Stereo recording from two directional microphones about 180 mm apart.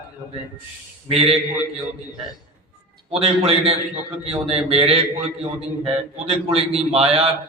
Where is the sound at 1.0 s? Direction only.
35° right (ahead or behind).